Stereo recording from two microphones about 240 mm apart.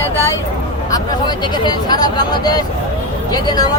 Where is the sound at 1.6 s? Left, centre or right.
Centre.